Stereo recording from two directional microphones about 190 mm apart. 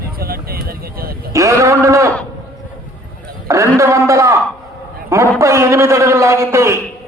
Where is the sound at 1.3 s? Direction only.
15° right (ahead or behind).